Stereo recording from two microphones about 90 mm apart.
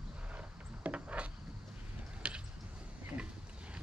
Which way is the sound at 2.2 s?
15° right (ahead or behind).